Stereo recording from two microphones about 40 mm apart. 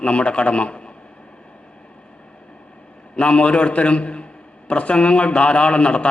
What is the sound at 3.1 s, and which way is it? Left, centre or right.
A man's voice, left.